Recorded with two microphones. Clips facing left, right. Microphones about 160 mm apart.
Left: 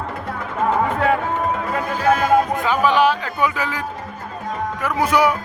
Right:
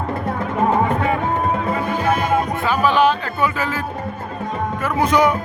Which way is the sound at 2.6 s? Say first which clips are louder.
Right 3 dB; 15° left (ahead or behind).